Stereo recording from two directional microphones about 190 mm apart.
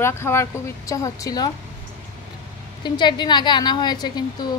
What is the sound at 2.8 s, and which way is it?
A woman's voice, 25° left (ahead or behind).